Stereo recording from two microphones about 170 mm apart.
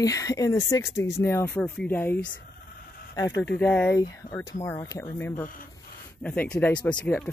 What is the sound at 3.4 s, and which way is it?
Speech, 5° left (ahead or behind).